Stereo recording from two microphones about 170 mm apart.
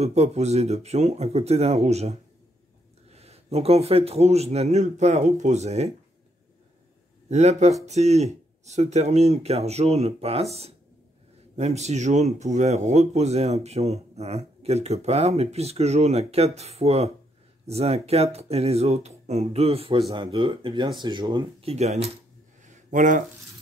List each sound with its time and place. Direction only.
0.0 s speech: 40° right (ahead or behind)
7.2 s speech: 40° right (ahead or behind)
22.7 s a sound: 45° right (ahead or behind)